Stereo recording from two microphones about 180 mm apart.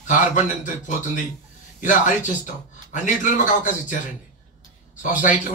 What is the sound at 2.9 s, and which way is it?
A man's voice, 45° left (ahead or behind).